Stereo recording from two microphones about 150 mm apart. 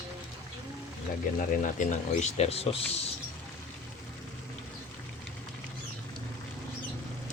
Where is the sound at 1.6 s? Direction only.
55° left (ahead or behind).